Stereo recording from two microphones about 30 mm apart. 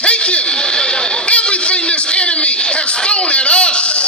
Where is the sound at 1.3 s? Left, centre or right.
Left.